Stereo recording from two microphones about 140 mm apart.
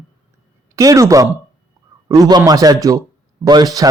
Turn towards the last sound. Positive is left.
turn(degrees=-30)  # may be behind; listen again after turning